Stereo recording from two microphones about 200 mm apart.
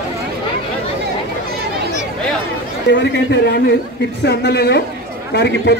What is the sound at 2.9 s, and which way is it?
A man's voice, 60° left (ahead or behind).